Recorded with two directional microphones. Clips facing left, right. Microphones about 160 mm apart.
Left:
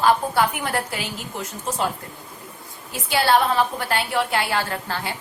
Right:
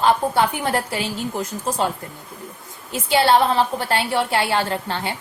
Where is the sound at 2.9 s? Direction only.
25° right (ahead or behind).